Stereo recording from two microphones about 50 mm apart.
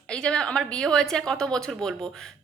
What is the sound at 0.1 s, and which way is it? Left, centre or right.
A woman's voice, centre.